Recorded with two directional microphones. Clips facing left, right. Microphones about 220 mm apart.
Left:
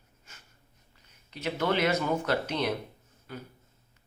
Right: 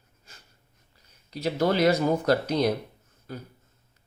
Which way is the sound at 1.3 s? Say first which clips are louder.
Right 4 dB; 35° right (ahead or behind).